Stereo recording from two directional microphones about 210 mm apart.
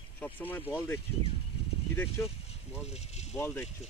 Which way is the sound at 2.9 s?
30° left (ahead or behind).